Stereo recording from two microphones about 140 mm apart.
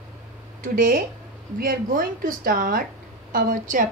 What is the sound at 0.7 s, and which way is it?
A woman's voice, 85° right.